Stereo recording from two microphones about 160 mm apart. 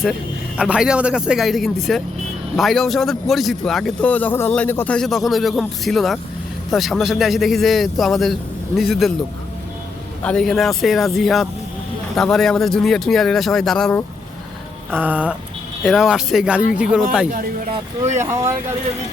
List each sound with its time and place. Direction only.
0.5 s speech: 5° right (ahead or behind); by 4.9 s 10° left (ahead or behind)
4.9 s speech: centre (ahead or behind)
10.2 s speech: 5° left (ahead or behind)
14.8 s a sound: 10° right (ahead or behind)
15.8 s speech: centre (ahead or behind)
18.2 s a sound: 20° right (ahead or behind)